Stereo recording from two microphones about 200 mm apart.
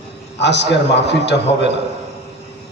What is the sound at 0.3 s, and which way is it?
A man's voice, 60° left (ahead or behind).